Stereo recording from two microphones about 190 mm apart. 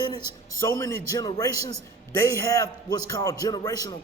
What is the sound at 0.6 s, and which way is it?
A man's voice, 15° left (ahead or behind).